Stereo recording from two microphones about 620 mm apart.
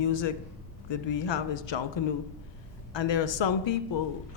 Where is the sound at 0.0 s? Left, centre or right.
Left.